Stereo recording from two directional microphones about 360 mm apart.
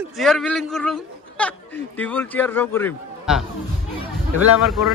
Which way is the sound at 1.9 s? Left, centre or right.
Centre.